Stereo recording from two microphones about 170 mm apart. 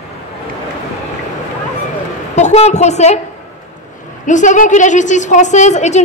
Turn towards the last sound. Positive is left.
turn(degrees=45)  # may be behind; listen again after turning